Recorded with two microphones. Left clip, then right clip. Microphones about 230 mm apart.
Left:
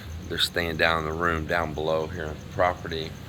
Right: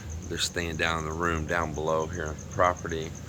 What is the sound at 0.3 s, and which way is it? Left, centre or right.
Speech, centre.